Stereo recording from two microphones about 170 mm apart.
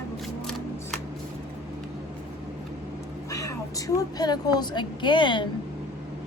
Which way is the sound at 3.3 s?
20° left (ahead or behind).